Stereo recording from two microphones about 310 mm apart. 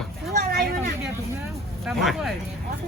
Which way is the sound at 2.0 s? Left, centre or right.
Centre.